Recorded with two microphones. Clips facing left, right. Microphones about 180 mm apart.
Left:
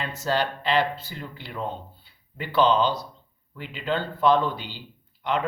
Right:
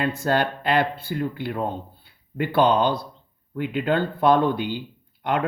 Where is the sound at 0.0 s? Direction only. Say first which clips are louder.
Right 4 dB; 55° right (ahead or behind).